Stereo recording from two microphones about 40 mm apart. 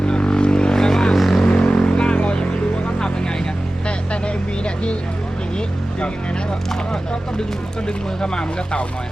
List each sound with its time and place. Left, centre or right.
0.0 s vehicle: left; by 1.5 s centre
1.5 s vehicle: left
6.7 s a sound: centre
7.9 s speech: centre